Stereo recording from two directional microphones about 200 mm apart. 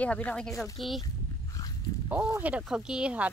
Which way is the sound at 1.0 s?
20° left (ahead or behind).